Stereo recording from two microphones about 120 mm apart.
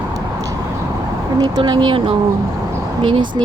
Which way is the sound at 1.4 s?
35° right (ahead or behind).